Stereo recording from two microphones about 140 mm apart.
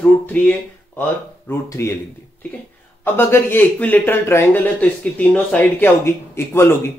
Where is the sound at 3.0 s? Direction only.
15° left (ahead or behind).